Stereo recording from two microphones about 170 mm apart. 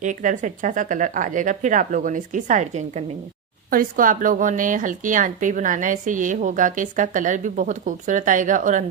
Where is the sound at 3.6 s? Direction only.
55° right (ahead or behind).